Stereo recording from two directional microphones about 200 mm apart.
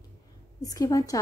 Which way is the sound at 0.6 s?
15° left (ahead or behind).